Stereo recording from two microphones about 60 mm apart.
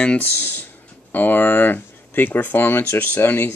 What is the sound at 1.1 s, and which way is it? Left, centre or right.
Speech, left.